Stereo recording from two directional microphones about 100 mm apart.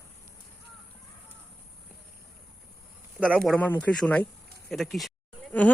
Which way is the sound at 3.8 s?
10° left (ahead or behind).